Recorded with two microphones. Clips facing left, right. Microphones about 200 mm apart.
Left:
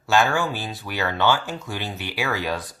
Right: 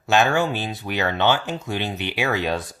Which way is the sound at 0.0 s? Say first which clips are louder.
Right 2 dB; 20° right (ahead or behind).